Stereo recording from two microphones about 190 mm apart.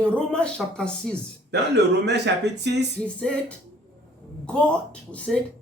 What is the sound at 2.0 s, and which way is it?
Speech, 65° right (ahead or behind).